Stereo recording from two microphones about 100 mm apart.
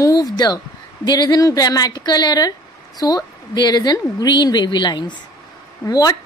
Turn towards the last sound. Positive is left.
turn(degrees=40)  # may be behind; listen again after turning